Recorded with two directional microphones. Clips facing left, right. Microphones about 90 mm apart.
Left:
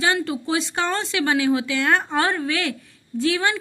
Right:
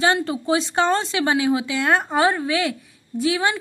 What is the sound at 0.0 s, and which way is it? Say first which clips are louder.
Speech: right 2 dB; 25° right (ahead or behind).